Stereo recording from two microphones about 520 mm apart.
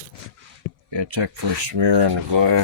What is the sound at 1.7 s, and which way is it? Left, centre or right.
Speech, right.